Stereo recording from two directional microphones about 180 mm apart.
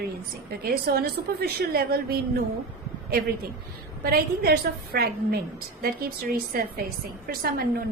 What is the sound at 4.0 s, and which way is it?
A woman's voice, 55° right (ahead or behind).